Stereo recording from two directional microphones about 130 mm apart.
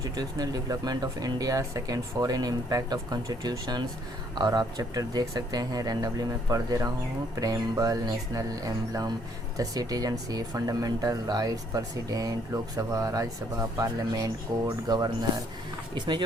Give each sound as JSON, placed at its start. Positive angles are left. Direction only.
{"t": 0.0, "sound": "speech", "side_deg": -30}